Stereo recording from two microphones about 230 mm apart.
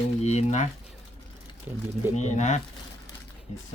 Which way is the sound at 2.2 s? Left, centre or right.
Left.